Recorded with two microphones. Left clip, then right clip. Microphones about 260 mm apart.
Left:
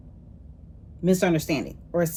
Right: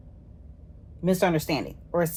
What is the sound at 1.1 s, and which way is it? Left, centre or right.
A woman's voice, centre.